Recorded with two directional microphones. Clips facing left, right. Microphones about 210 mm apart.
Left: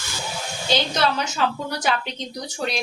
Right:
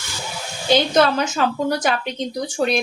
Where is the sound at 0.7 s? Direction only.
50° right (ahead or behind).